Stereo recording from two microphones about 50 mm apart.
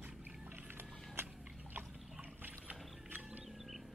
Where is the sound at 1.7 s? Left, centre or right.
Right.